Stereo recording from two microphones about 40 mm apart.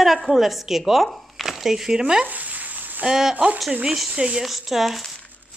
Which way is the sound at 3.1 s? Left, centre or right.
Centre.